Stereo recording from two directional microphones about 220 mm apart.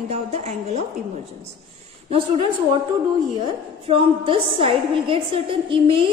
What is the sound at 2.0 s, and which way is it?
Speech, 25° right (ahead or behind).